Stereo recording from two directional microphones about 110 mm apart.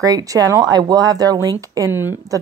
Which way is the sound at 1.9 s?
20° right (ahead or behind).